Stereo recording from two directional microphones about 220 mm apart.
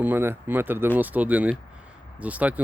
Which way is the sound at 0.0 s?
10° right (ahead or behind).